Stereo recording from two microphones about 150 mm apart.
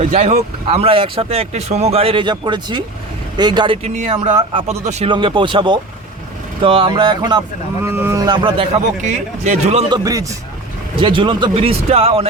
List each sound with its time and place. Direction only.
0.0 s speech: 55° right (ahead or behind); by 3.8 s 30° right (ahead or behind)
3.8 s speech: 50° right (ahead or behind)
5.1 s speech: 35° right (ahead or behind)
7.8 s speech: 15° right (ahead or behind)
8.2 s speech: 30° right (ahead or behind)
9.0 s speech: 55° right (ahead or behind)
9.9 s speech: 25° right (ahead or behind)
10.9 s speech: 35° right (ahead or behind)